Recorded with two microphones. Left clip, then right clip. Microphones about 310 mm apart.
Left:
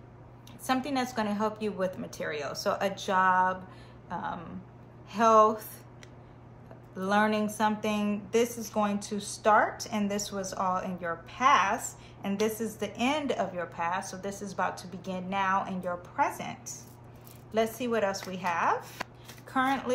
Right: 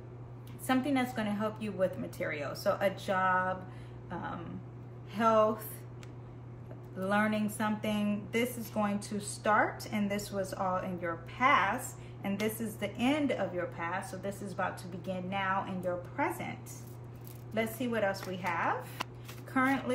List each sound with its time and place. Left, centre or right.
0.7 s a woman's voice: centre
5.1 s speech: centre
7.0 s a woman's voice: centre
17.6 s a woman's voice: centre